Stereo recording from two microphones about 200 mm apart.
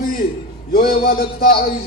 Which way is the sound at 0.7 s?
50° left (ahead or behind).